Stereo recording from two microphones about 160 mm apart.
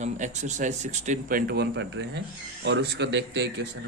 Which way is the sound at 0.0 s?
50° right (ahead or behind).